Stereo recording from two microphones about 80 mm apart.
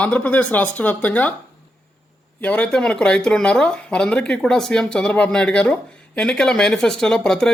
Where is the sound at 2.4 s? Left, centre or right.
Centre.